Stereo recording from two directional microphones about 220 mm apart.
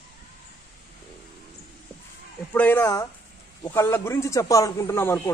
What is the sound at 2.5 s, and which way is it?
A man's voice, 10° left (ahead or behind).